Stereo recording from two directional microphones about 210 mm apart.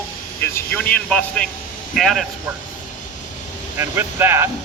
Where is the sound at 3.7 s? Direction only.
10° right (ahead or behind).